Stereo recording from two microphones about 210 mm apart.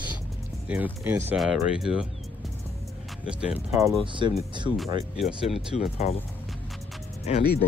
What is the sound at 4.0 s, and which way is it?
Speech, 25° right (ahead or behind).